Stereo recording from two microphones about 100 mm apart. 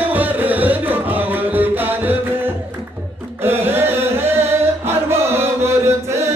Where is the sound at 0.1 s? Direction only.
20° right (ahead or behind).